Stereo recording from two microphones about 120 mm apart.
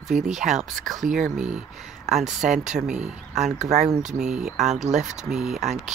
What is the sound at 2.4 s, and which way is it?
Speech, 90° right.